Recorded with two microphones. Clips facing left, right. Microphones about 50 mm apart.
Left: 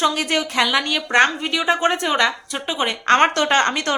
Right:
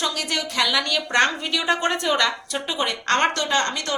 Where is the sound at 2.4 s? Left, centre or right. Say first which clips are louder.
Left 2 dB; centre.